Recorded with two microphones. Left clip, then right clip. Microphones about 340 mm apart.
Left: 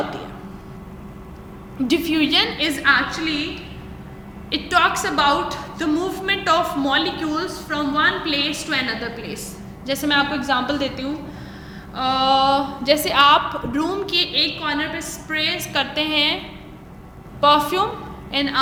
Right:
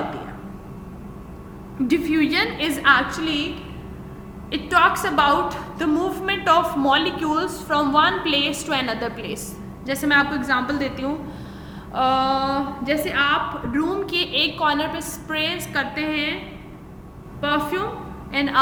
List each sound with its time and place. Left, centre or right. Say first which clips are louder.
1.9 s a woman's voice: left 2 dB; centre
4.5 s a woman's voice: even; centre
17.4 s a woman's voice: left 7 dB; centre